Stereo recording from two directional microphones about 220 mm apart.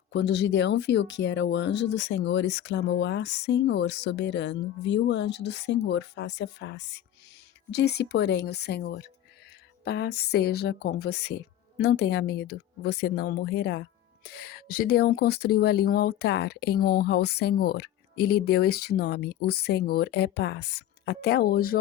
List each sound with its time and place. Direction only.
0.1 s speech: 50° left (ahead or behind)